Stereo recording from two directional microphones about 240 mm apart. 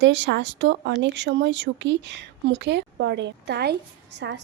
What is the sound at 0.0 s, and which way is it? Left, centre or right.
Speech, right.